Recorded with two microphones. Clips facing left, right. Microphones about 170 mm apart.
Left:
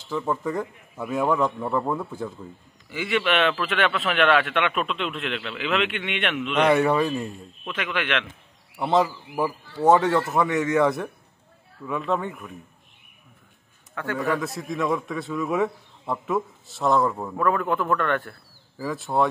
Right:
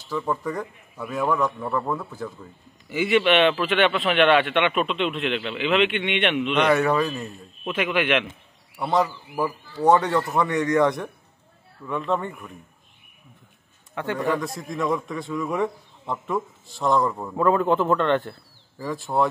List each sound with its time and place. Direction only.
0.1 s a man's voice: 5° left (ahead or behind)
2.9 s a man's voice: 15° right (ahead or behind)
3.3 s a man's voice: centre (ahead or behind)
6.7 s a man's voice: 15° left (ahead or behind)
7.6 s a man's voice: 10° right (ahead or behind)
8.7 s a man's voice: 15° left (ahead or behind)
13.9 s a man's voice: 20° right (ahead or behind)
14.3 s a man's voice: centre (ahead or behind)
17.4 s a man's voice: 25° right (ahead or behind)
18.8 s a man's voice: centre (ahead or behind)